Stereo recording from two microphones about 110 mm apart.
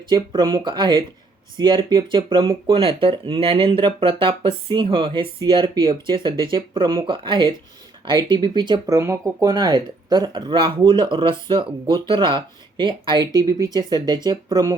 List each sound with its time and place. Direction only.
0.1 s speech: 45° right (ahead or behind)
8.9 s speech: 25° right (ahead or behind); by 13.2 s 50° right (ahead or behind)
13.3 s speech: 35° right (ahead or behind)